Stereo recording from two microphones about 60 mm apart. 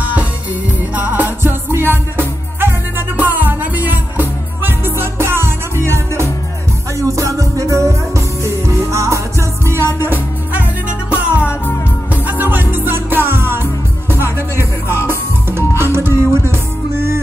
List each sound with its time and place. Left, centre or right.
0.9 s music: right
7.0 s music: right
9.9 s music: right